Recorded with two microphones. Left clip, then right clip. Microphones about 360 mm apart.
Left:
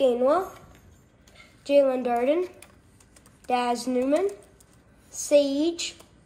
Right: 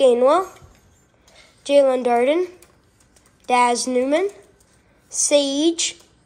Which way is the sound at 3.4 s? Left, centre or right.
Centre.